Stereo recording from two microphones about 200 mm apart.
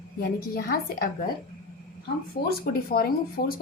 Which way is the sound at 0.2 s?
50° left (ahead or behind).